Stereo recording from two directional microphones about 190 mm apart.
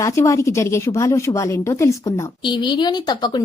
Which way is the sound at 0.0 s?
15° left (ahead or behind).